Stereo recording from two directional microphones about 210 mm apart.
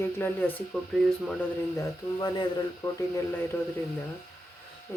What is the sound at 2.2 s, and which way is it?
Speech, 20° left (ahead or behind).